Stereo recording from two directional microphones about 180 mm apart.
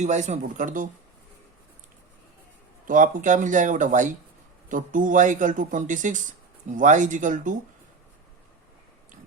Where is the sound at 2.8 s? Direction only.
45° right (ahead or behind).